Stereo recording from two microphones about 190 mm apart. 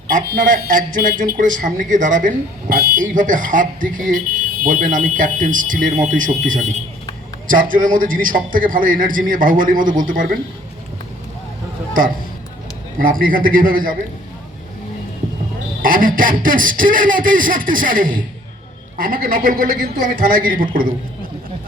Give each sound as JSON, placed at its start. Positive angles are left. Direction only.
{"t": 0.3, "sound": "speech", "side_deg": -45}
{"t": 13.0, "sound": "speech", "side_deg": -50}
{"t": 15.8, "sound": "speech", "side_deg": -50}